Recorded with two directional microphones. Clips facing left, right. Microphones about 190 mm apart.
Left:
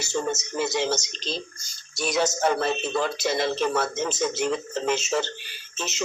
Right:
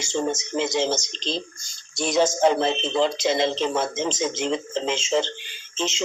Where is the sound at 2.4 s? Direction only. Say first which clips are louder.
Right 4 dB; 20° right (ahead or behind).